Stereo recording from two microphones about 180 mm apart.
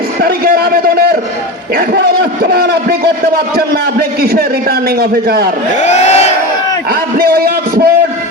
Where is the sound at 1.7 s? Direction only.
60° right (ahead or behind).